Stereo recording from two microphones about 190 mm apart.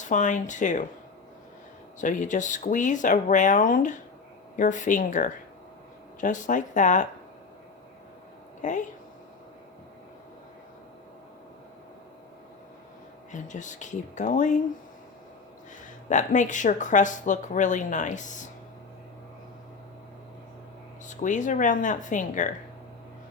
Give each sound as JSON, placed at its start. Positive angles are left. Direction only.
{"t": 0.0, "sound": "speech", "side_deg": 40}
{"t": 2.0, "sound": "speech", "side_deg": 40}
{"t": 8.6, "sound": "speech", "side_deg": 40}
{"t": 13.3, "sound": "speech", "side_deg": 40}
{"t": 16.0, "sound": "speech", "side_deg": 40}
{"t": 21.1, "sound": "speech", "side_deg": 40}